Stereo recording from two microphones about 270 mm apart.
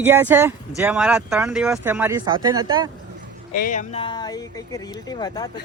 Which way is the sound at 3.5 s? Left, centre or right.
Left.